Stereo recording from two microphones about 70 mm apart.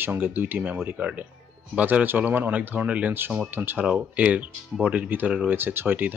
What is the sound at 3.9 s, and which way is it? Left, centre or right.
Speech, centre.